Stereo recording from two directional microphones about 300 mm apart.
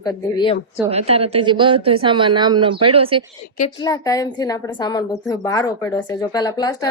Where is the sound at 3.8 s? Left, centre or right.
Centre.